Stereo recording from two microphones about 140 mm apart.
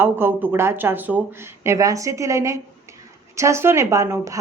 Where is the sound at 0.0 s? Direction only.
15° right (ahead or behind).